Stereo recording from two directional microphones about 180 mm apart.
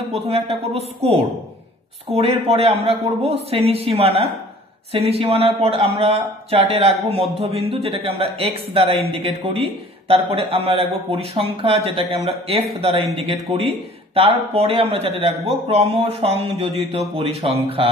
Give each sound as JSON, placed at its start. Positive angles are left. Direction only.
{"t": 0.1, "sound": "a man's voice", "side_deg": -35}